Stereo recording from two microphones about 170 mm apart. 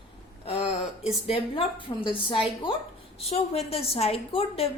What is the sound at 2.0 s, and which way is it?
A woman's voice, 30° left (ahead or behind).